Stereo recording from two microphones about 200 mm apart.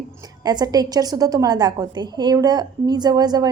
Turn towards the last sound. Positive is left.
turn(degrees=-20)  # may be behind; listen again after turning